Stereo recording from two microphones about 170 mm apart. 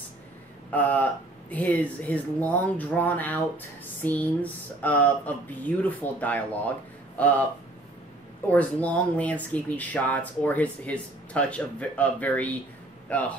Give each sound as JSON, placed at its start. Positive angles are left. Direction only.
{"t": 0.7, "sound": "speech", "side_deg": 10}
{"t": 8.5, "sound": "speech", "side_deg": 10}